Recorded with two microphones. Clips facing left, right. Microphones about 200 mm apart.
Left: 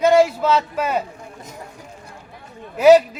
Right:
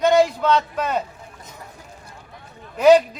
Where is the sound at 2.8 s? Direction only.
5° left (ahead or behind).